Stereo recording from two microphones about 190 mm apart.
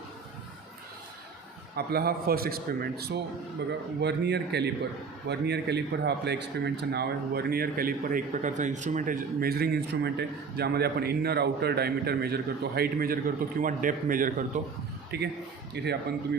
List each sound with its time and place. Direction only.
1.7 s a man's voice: 55° right (ahead or behind)
15.1 s a man's voice: 60° right (ahead or behind)